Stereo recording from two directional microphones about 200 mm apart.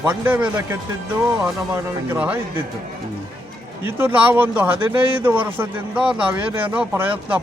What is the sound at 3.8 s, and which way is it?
Speech, 10° right (ahead or behind).